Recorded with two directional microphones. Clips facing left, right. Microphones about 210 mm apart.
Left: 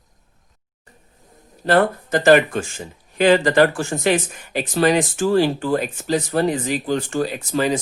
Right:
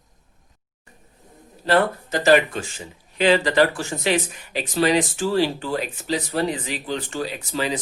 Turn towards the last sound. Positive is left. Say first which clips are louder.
# left 5 dB
turn(degrees=45)  # may be behind; listen again after turning